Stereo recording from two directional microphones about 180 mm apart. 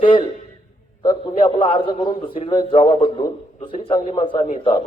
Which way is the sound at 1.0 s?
25° left (ahead or behind).